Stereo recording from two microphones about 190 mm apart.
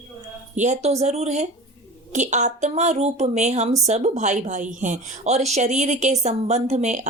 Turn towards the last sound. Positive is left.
turn(degrees=-40)  # may be behind; listen again after turning